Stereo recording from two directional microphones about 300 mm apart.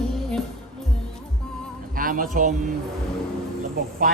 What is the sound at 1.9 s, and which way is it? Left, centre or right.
Music, right.